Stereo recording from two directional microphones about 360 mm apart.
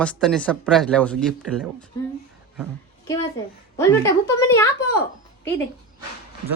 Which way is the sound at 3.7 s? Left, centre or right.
Centre.